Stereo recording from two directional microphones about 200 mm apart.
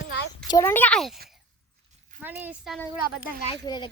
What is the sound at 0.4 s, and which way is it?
Speech, 15° left (ahead or behind).